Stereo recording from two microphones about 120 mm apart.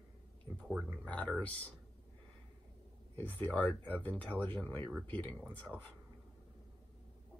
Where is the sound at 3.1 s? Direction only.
15° left (ahead or behind).